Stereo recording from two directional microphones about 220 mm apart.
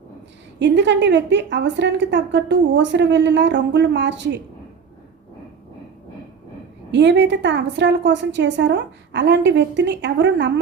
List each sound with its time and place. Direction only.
0.6 s a woman's voice: 55° right (ahead or behind)
6.9 s a woman's voice: 55° right (ahead or behind)